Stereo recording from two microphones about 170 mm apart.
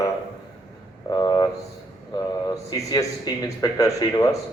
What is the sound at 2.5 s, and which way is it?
A man's voice, 20° left (ahead or behind).